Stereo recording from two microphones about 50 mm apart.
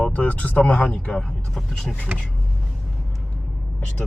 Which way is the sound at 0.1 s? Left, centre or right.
Left.